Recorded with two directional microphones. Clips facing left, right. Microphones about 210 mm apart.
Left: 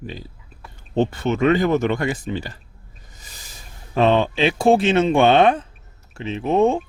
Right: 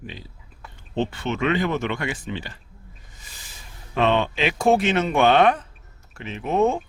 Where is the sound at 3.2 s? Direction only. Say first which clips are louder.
Left 4 dB; 40° left (ahead or behind).